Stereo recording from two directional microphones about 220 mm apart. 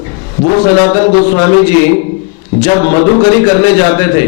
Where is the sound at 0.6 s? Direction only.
10° left (ahead or behind).